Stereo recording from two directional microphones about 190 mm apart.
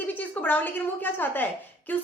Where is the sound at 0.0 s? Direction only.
10° left (ahead or behind).